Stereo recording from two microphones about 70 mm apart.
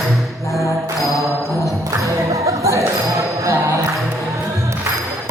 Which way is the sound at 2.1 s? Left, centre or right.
Right.